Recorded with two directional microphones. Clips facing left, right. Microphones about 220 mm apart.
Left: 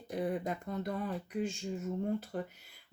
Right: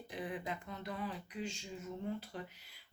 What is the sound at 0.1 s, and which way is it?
A woman's voice, 45° left (ahead or behind).